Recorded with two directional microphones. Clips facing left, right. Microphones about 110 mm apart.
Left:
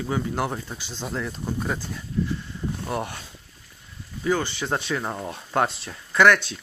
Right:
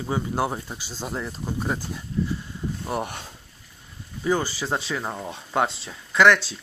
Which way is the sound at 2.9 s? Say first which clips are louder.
Right 1 dB; 10° right (ahead or behind).